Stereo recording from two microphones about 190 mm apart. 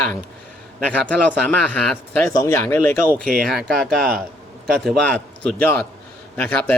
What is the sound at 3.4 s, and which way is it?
A man's voice, centre (ahead or behind).